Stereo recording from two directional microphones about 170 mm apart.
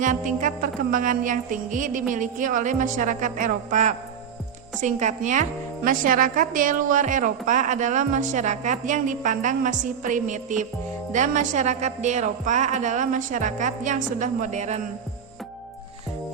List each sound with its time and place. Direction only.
0.0 s a woman's voice: 50° right (ahead or behind)